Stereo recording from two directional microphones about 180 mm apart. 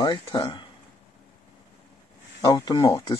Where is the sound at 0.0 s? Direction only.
25° left (ahead or behind).